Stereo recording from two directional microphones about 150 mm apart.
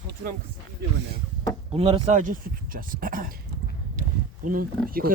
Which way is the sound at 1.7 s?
40° right (ahead or behind).